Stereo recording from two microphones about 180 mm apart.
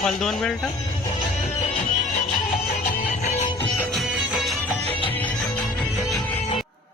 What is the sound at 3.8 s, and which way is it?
Music, centre (ahead or behind).